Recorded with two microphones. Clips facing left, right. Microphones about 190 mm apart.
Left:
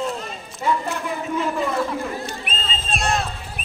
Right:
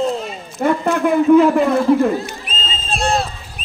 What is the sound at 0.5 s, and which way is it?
A man's voice, 60° right (ahead or behind).